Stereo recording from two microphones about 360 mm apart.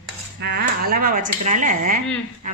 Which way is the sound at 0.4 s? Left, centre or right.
Right.